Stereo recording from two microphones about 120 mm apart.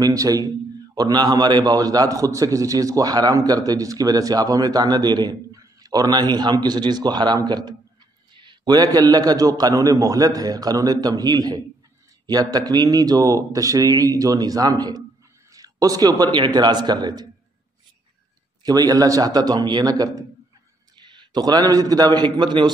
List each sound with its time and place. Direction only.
0.0 s a man's voice: 30° right (ahead or behind)
18.6 s a man's voice: 30° right (ahead or behind)